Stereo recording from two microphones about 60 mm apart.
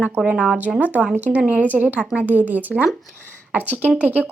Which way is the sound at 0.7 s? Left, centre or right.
Right.